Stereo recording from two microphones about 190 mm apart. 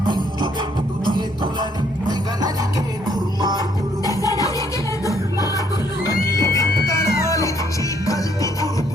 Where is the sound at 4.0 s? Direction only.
20° left (ahead or behind).